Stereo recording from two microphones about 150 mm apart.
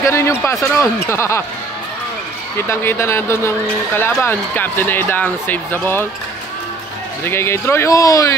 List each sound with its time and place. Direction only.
0.0 s speech: 15° left (ahead or behind)
2.5 s speech: 15° left (ahead or behind)
7.2 s speech: 15° left (ahead or behind)